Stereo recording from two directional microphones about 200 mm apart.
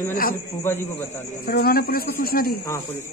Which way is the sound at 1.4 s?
50° left (ahead or behind).